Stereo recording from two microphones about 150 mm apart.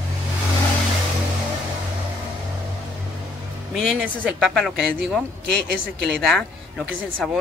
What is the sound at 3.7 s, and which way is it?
Speech, centre (ahead or behind).